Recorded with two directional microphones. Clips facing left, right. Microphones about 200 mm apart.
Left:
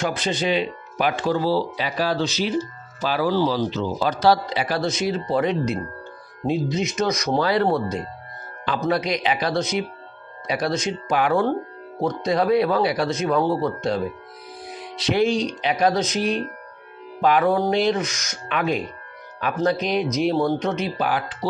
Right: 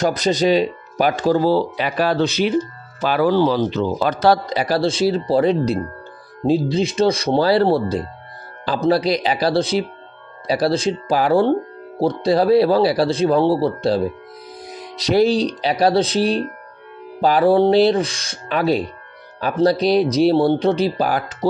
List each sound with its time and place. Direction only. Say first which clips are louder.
0.0 s speech: right 6 dB; 40° right (ahead or behind)